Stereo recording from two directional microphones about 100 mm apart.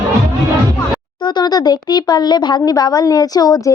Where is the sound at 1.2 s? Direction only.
45° left (ahead or behind).